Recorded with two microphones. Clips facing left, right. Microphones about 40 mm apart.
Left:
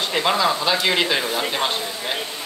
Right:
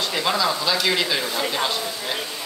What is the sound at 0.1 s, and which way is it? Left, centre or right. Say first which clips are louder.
A man's voice: left 4 dB; left.